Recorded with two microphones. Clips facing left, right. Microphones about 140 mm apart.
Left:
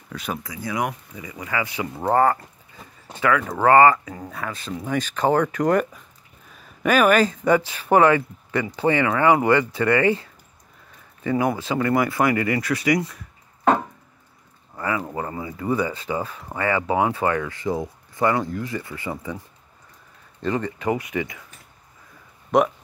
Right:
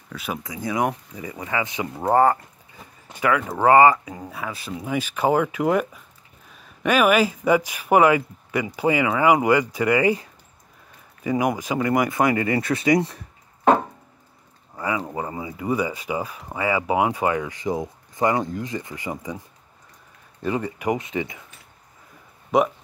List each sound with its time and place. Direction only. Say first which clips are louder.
0.1 s speech: left 1 dB; 5° right (ahead or behind)
0.4 s speech: right 4 dB; 20° right (ahead or behind)
14.8 s speech: even; 15° right (ahead or behind)
20.4 s speech: even; 15° right (ahead or behind)
22.5 s speech: left 1 dB; centre (ahead or behind)